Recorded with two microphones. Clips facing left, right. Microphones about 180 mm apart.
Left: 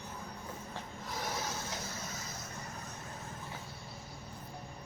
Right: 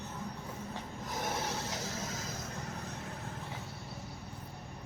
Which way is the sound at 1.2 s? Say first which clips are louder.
Right 3 dB; 55° right (ahead or behind).